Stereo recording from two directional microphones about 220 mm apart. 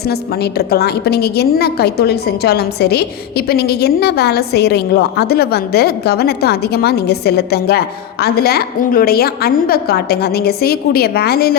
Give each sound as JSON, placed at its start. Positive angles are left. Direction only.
{"t": 0.0, "sound": "a woman's voice", "side_deg": 45}